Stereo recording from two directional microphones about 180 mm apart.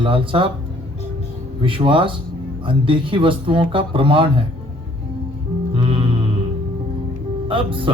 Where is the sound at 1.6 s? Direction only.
30° right (ahead or behind).